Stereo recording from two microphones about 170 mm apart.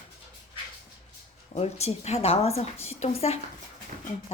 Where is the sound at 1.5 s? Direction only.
40° left (ahead or behind).